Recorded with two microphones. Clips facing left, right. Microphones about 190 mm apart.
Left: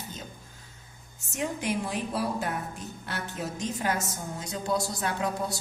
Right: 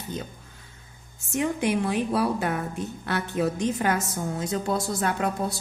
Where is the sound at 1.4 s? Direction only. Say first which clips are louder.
Right 6 dB; 60° right (ahead or behind).